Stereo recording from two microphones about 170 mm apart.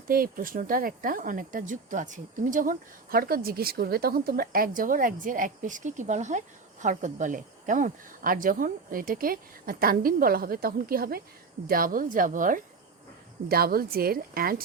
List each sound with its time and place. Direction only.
0.1 s a woman's voice: 55° right (ahead or behind)
13.5 s speech: 60° right (ahead or behind)